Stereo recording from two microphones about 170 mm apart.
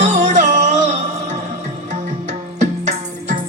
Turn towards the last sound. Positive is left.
turn(degrees=-45)  # may be behind; listen again after turning